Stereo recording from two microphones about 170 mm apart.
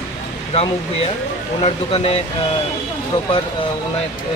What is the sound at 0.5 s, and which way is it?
Speech, 35° left (ahead or behind).